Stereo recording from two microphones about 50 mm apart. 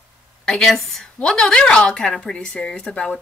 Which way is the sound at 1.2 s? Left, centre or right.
Centre.